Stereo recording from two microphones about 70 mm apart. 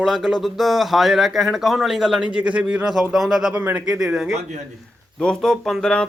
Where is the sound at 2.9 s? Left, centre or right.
Centre.